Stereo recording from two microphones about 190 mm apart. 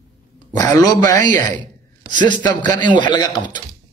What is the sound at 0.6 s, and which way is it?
Speech, 20° left (ahead or behind).